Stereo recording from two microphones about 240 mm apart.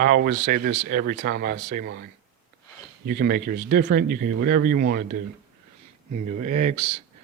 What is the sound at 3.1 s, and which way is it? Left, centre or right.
Speech, right.